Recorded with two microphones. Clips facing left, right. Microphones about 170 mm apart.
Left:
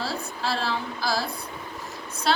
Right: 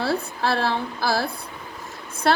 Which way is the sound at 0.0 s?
60° right (ahead or behind).